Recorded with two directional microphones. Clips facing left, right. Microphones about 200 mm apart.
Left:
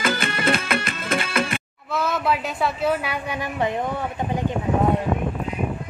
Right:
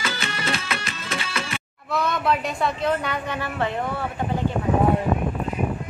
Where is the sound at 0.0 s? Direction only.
55° left (ahead or behind).